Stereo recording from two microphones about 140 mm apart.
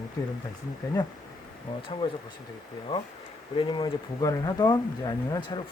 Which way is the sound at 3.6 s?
35° left (ahead or behind).